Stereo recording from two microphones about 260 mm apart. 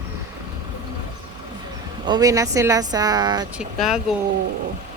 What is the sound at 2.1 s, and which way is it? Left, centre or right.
A woman's voice, centre.